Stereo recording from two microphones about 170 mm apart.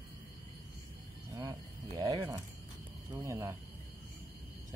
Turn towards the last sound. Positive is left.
turn(degrees=-15)  # may be behind; listen again after turning